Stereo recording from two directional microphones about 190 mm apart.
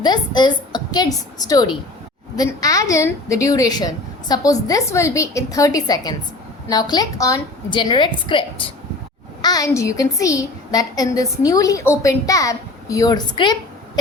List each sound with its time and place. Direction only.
0.0 s a woman's voice: 25° left (ahead or behind)